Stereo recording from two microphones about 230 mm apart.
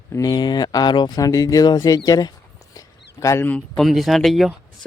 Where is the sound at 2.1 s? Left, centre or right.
Centre.